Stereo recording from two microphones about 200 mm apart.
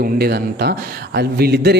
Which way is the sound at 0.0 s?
50° right (ahead or behind).